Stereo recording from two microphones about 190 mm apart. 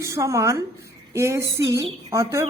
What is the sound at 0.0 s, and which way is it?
A woman's voice, 15° right (ahead or behind).